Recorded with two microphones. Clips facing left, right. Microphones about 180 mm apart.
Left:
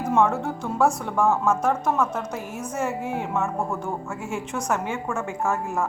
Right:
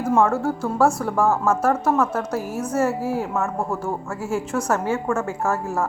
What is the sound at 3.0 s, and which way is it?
Speech, 35° right (ahead or behind).